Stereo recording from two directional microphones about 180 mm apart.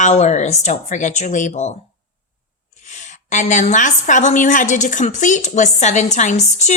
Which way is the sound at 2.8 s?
40° left (ahead or behind).